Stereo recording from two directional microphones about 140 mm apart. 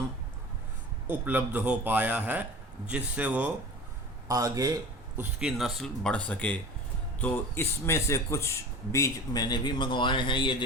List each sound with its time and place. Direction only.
1.0 s a man's voice: 15° right (ahead or behind)
4.3 s speech: 25° right (ahead or behind)
5.1 s speech: 10° right (ahead or behind); by 10.6 s 35° left (ahead or behind)